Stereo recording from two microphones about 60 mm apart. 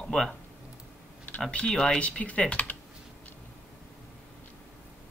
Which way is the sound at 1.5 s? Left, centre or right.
Centre.